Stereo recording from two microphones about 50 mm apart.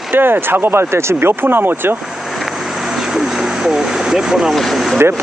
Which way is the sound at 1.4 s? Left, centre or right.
Right.